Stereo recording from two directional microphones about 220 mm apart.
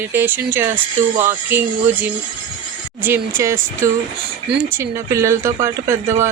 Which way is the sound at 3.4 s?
10° right (ahead or behind).